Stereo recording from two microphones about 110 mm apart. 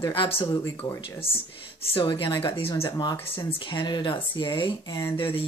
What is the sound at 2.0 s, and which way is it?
Speech, 50° left (ahead or behind).